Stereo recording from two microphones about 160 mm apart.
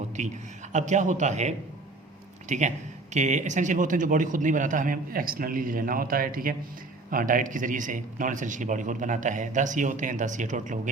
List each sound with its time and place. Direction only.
0.2 s a man's voice: 50° right (ahead or behind)